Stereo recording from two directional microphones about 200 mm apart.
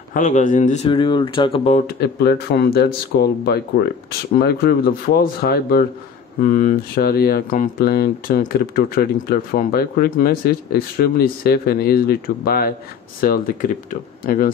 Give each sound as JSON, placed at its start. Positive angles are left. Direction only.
{"t": 0.1, "sound": "speech", "side_deg": 40}
{"t": 0.8, "sound": "speech", "side_deg": 25}
{"t": 1.9, "sound": "speech", "side_deg": 55}